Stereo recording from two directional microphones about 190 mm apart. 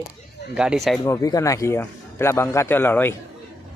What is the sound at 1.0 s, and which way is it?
A man's voice, 15° left (ahead or behind).